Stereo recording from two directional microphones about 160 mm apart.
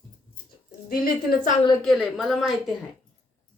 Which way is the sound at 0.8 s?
70° left (ahead or behind).